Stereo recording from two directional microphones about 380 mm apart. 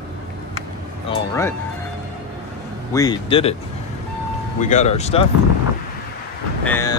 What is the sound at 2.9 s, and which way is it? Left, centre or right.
Speech, centre.